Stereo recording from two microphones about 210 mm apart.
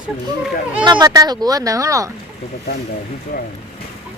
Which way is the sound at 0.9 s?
20° right (ahead or behind).